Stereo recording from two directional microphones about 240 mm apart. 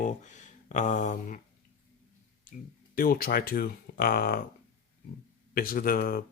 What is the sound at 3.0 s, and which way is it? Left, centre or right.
Speech, left.